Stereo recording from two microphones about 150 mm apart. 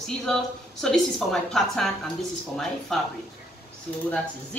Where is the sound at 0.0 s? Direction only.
5° left (ahead or behind).